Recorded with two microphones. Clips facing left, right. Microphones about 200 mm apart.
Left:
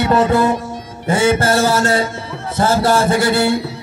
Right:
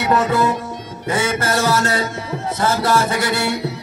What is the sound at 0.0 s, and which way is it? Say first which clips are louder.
Music: left 3 dB; 30° left (ahead or behind).